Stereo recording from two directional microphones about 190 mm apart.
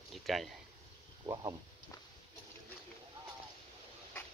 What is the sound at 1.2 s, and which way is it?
Speech, 20° right (ahead or behind).